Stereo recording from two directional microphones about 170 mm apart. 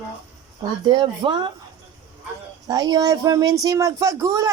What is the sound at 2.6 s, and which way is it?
Speech, 20° right (ahead or behind).